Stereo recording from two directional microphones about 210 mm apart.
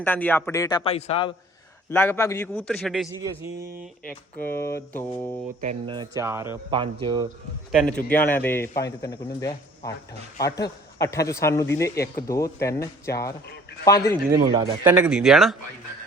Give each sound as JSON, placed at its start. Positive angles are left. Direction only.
{"t": 0.0, "sound": "a man's voice", "side_deg": 10}
{"t": 0.9, "sound": "a man's voice", "side_deg": 30}
{"t": 1.9, "sound": "a man's voice", "side_deg": 10}
{"t": 3.2, "sound": "speech", "side_deg": -15}
{"t": 4.4, "sound": "a man's voice", "side_deg": 10}
{"t": 5.5, "sound": "speech", "side_deg": -30}
{"t": 6.7, "sound": "speech", "side_deg": -25}
{"t": 7.7, "sound": "a man's voice", "side_deg": 0}
{"t": 14.3, "sound": "speech", "side_deg": -15}
{"t": 14.8, "sound": "speech", "side_deg": -10}